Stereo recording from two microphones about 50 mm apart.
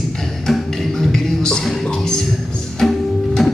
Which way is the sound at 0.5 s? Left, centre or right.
Centre.